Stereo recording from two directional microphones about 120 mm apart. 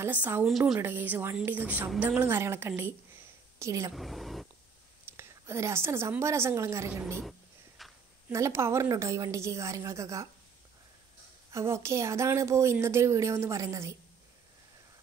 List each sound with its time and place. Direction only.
0.0 s a woman's voice: 15° right (ahead or behind)
0.5 s speech: centre (ahead or behind)
0.7 s a woman's voice: 15° right (ahead or behind)
3.9 s speech: centre (ahead or behind)
5.1 s a woman's voice: 20° right (ahead or behind)
7.2 s a sound: centre (ahead or behind)
8.3 s a woman's voice: 20° right (ahead or behind)
11.5 s a woman's voice: 25° right (ahead or behind)